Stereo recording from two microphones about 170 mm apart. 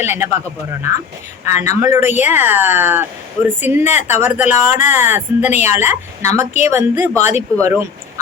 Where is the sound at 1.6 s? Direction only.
15° right (ahead or behind).